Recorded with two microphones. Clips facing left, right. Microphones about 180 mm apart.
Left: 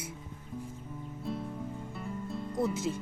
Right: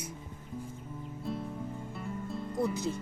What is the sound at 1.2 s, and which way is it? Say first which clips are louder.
Music: even; centre (ahead or behind).